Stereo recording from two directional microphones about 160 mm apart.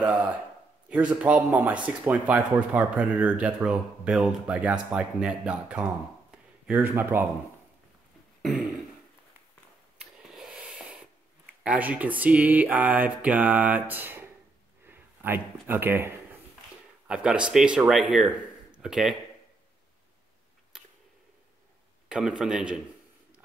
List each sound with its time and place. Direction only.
0.0 s a man's voice: 10° right (ahead or behind)
6.3 s a sound: 10° right (ahead or behind)
8.4 s throat clearing: centre (ahead or behind)
9.9 s a sound: 5° right (ahead or behind)
11.6 s speech: 10° right (ahead or behind)
22.1 s speech: 5° right (ahead or behind)